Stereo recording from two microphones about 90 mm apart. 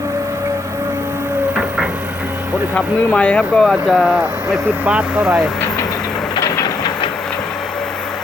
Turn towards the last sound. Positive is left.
turn(degrees=40)  # may be behind; listen again after turning